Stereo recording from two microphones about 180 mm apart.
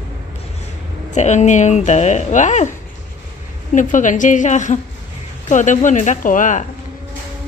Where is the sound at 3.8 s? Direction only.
45° left (ahead or behind).